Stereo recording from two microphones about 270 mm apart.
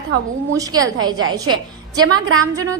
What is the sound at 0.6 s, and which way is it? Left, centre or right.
A woman's voice, centre.